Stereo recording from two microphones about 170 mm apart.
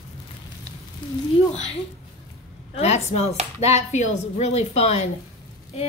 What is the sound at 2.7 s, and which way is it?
Speech, 40° left (ahead or behind).